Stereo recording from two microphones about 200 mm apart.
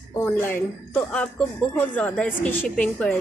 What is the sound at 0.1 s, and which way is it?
Speech, 10° left (ahead or behind).